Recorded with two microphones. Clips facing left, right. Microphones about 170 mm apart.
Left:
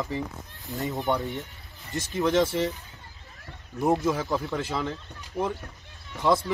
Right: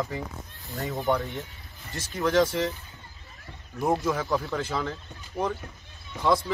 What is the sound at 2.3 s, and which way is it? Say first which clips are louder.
Speech: right 1 dB; 25° left (ahead or behind).